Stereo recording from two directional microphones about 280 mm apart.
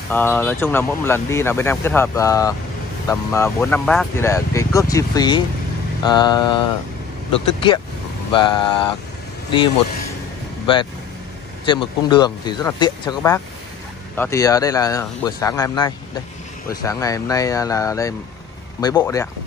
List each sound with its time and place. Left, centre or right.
0.1 s speech: centre
10.7 s speech: centre